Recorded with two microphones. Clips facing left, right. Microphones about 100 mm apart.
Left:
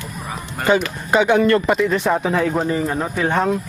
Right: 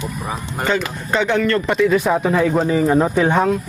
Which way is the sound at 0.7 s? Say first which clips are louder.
Left 4 dB; 10° left (ahead or behind).